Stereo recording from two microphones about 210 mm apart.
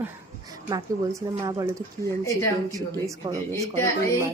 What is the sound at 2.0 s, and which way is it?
Speech, 15° left (ahead or behind).